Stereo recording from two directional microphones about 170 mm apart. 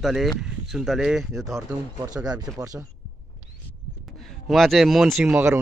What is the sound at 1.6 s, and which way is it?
Speech, 20° right (ahead or behind).